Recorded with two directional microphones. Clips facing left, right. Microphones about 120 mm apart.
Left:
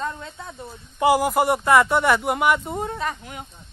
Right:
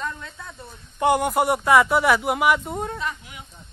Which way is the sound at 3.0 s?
40° left (ahead or behind).